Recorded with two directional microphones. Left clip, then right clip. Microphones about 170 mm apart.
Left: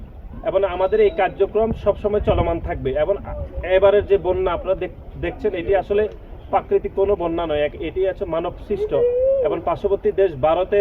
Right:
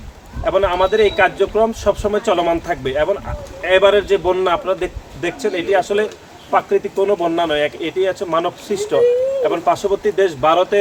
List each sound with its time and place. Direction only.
0.4 s a man's voice: 20° right (ahead or behind)